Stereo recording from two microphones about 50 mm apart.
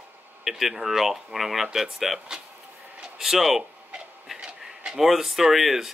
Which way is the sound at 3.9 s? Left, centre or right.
Centre.